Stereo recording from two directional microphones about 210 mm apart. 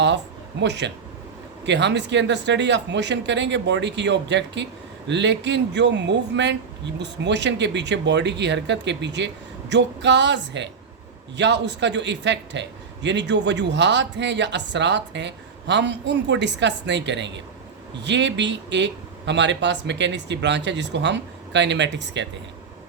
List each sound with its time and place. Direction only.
0.6 s a man's voice: 55° right (ahead or behind)